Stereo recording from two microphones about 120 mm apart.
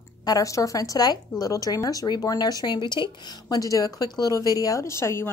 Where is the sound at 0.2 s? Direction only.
30° left (ahead or behind).